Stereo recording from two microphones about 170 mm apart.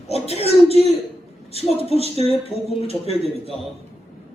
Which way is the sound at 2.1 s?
35° left (ahead or behind).